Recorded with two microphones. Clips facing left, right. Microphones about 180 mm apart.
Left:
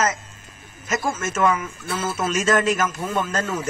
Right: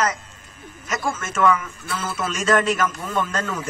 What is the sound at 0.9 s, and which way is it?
Speech, 40° left (ahead or behind).